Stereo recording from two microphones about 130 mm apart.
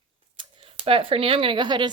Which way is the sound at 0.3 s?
45° right (ahead or behind).